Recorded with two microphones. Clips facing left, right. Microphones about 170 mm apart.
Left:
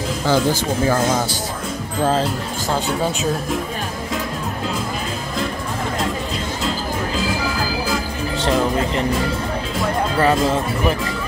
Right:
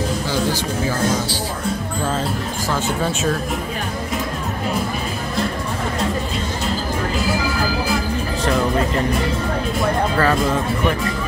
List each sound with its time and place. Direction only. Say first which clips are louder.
0.5 s speech: left 3 dB; 45° left (ahead or behind)
10.1 s speech: left 5 dB; 20° left (ahead or behind)